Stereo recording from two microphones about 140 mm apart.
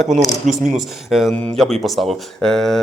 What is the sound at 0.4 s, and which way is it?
Speech, 60° right (ahead or behind).